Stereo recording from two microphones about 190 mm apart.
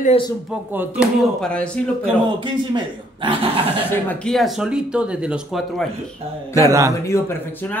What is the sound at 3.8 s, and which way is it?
Speech, 5° left (ahead or behind).